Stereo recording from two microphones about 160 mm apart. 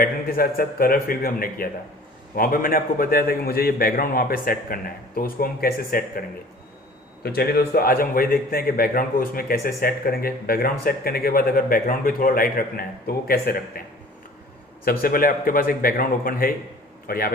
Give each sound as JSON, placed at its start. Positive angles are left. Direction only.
{"t": 0.0, "sound": "a man's voice", "side_deg": 65}
{"t": 7.2, "sound": "a man's voice", "side_deg": 75}
{"t": 14.8, "sound": "a man's voice", "side_deg": 65}